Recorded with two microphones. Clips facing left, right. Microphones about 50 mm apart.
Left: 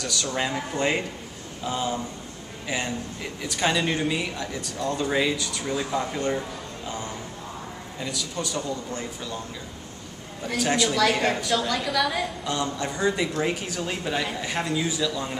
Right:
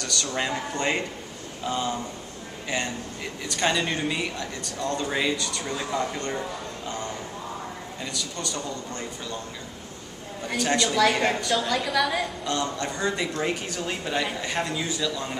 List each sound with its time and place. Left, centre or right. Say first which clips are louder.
0.0 s a woman's voice: left 1 dB; centre
3.4 s a woman's voice: left 1 dB; centre
8.0 s a woman's voice: left 3 dB; centre
10.5 s a woman's voice: even; centre